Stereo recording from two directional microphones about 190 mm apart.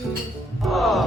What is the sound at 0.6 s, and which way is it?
Music, centre (ahead or behind).